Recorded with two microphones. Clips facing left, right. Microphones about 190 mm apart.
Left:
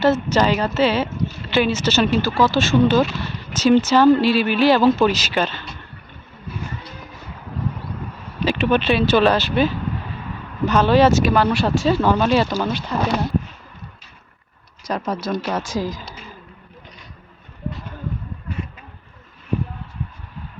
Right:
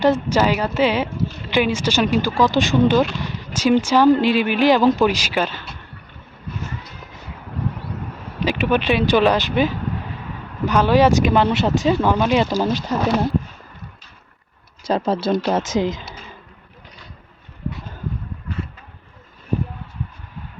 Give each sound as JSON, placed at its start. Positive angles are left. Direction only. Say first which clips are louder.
{"t": 0.0, "sound": "speech", "louder": "even", "side_deg": -10}
{"t": 8.4, "sound": "speech", "louder": "left 1 dB", "side_deg": -15}
{"t": 14.8, "sound": "speech", "louder": "right 5 dB", "side_deg": -30}